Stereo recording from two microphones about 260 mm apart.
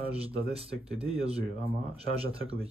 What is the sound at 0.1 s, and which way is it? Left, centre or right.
Speech, right.